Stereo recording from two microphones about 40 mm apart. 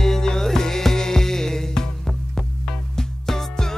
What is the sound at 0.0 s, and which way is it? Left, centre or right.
Music, centre.